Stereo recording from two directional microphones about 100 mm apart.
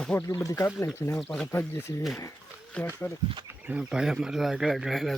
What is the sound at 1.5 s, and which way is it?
Speech, 25° left (ahead or behind).